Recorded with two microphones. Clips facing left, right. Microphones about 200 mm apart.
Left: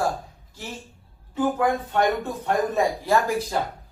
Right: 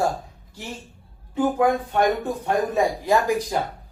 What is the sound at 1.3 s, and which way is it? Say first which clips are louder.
Speech: right 2 dB; 10° right (ahead or behind).